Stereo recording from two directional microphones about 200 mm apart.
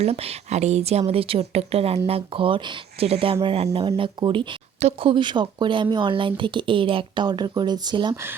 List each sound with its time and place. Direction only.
0.0 s speech: 30° right (ahead or behind); by 8.4 s 10° right (ahead or behind)